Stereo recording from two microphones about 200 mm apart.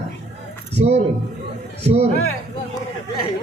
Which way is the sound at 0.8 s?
35° right (ahead or behind).